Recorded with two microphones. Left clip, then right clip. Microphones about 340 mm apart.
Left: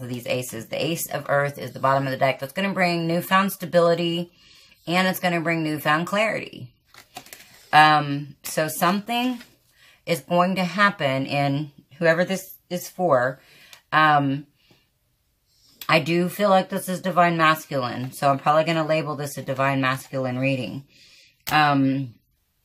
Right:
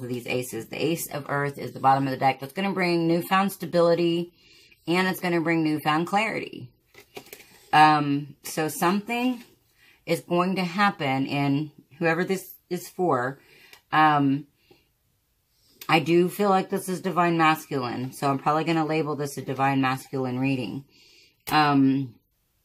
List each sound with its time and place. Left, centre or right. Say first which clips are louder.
0.3 s speech: left 4 dB; left
7.7 s speech: left 2 dB; left
15.9 s speech: even; left
21.5 s speech: left 2 dB; left